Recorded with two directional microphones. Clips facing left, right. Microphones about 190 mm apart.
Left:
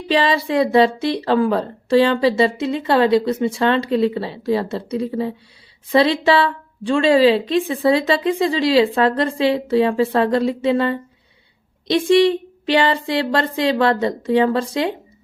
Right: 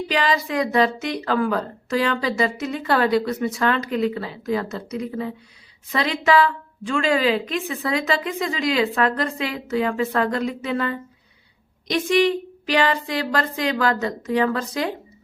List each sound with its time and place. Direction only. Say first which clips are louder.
0.1 s a woman's voice: left 6 dB; 30° left (ahead or behind)